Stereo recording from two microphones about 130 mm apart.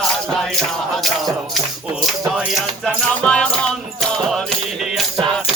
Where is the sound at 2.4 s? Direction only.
Centre (ahead or behind).